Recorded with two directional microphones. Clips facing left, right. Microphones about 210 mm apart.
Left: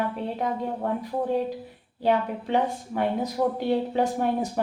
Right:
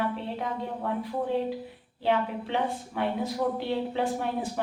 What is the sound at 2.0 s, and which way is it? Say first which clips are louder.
A woman's voice: left 3 dB; 45° left (ahead or behind).